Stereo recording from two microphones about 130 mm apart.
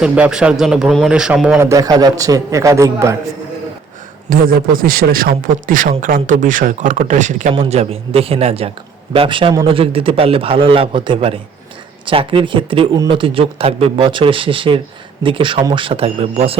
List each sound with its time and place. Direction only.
0.0 s a man's voice: 5° right (ahead or behind)
1.5 s a man's voice: 25° right (ahead or behind)
4.3 s a man's voice: 90° right; by 7.5 s 70° right (ahead or behind)
7.7 s a man's voice: 50° right (ahead or behind)